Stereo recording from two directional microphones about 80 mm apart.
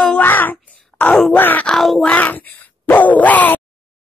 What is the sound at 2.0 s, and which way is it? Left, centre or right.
Speech, left.